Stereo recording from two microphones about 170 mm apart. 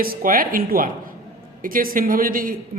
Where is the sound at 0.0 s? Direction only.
55° right (ahead or behind).